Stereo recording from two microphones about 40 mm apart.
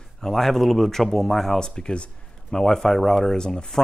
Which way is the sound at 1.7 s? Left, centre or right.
Left.